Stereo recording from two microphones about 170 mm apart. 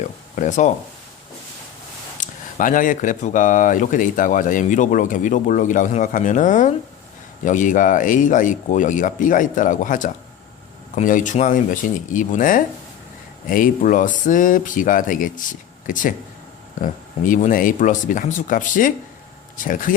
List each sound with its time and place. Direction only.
0.3 s speech: 45° left (ahead or behind)
2.2 s speech: 50° left (ahead or behind)